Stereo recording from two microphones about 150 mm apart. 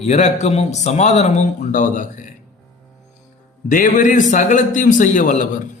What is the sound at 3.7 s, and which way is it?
A man's voice, 60° left (ahead or behind).